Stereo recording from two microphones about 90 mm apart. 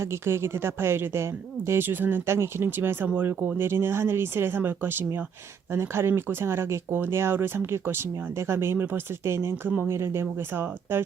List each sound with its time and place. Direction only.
0.0 s speech: 30° right (ahead or behind)